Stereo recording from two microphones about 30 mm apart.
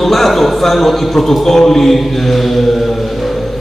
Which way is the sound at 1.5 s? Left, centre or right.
Centre.